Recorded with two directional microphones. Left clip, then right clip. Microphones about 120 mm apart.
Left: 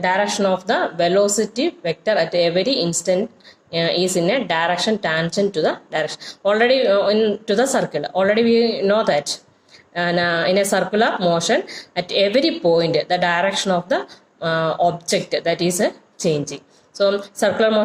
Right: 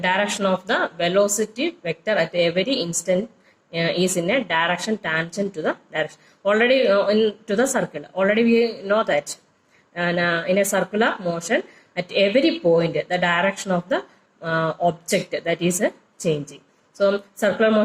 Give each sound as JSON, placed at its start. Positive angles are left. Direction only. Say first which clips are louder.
{"t": 0.0, "sound": "speech", "louder": "left 3 dB", "side_deg": 35}